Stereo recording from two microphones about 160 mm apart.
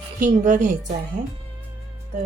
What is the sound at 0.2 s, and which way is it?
Speech, 50° right (ahead or behind).